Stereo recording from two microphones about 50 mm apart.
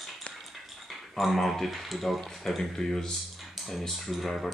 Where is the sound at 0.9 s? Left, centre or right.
Centre.